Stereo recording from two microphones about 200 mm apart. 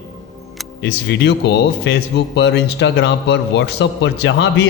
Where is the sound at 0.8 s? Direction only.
60° left (ahead or behind).